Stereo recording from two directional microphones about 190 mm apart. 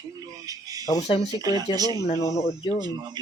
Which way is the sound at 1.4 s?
20° right (ahead or behind).